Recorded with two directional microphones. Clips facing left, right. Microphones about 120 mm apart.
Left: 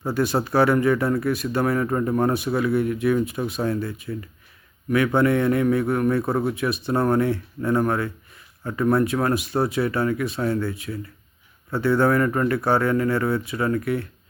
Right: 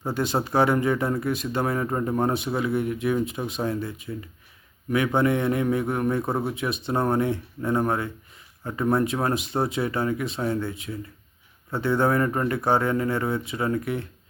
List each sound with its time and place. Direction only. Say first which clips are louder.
0.0 s speech: left 3 dB; 20° right (ahead or behind)